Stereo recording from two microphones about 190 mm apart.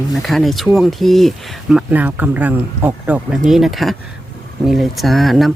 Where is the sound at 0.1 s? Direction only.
Centre (ahead or behind).